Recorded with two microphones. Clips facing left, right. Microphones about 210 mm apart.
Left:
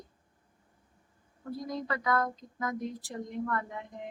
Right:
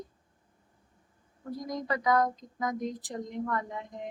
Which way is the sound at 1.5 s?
15° right (ahead or behind).